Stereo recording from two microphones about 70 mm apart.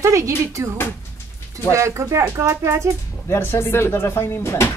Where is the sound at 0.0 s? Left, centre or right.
Right.